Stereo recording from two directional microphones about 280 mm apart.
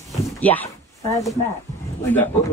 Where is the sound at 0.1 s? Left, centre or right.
Centre.